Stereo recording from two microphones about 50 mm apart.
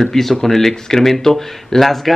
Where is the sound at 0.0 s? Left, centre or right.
Centre.